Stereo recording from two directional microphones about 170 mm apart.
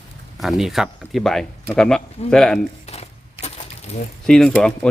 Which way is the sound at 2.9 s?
40° left (ahead or behind).